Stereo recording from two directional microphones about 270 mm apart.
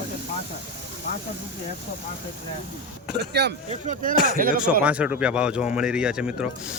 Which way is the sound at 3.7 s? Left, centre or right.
Right.